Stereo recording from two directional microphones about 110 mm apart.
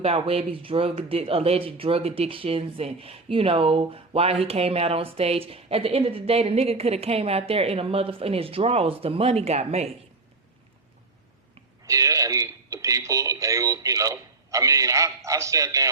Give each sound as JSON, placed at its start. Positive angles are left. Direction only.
{"t": 0.0, "sound": "speech", "side_deg": -65}
{"t": 11.9, "sound": "speech", "side_deg": -30}